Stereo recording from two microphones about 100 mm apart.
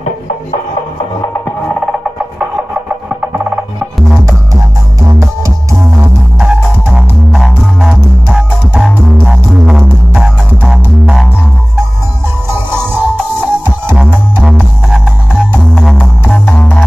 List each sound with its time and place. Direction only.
3.1 s music: 15° right (ahead or behind)
6.4 s music: 5° right (ahead or behind)
12.5 s music: 20° right (ahead or behind)
14.4 s music: centre (ahead or behind)
16.4 s music: 15° left (ahead or behind)